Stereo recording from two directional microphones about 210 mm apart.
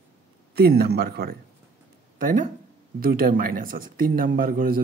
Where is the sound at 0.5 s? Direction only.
50° right (ahead or behind).